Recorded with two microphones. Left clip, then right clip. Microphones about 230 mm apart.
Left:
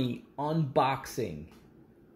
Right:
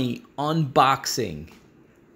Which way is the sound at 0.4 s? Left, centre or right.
Right.